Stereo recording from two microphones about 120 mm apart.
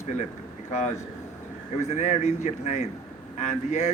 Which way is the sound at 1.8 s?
75° left (ahead or behind).